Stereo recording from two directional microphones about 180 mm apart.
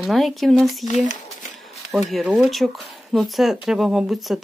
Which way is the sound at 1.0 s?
45° left (ahead or behind).